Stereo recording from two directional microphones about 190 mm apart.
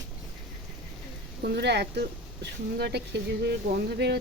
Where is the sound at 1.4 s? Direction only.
65° right (ahead or behind).